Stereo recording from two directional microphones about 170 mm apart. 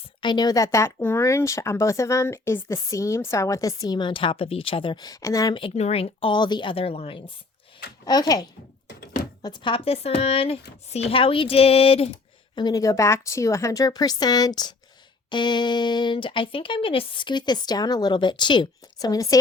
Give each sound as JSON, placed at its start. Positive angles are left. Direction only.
{"t": 0.2, "sound": "speech", "side_deg": 25}
{"t": 8.0, "sound": "speech", "side_deg": 25}
{"t": 12.5, "sound": "speech", "side_deg": 20}